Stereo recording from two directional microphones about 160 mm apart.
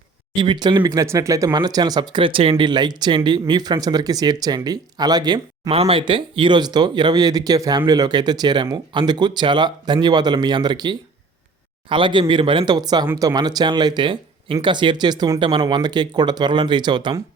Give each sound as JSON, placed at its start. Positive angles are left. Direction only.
{"t": 0.3, "sound": "a man's voice", "side_deg": -30}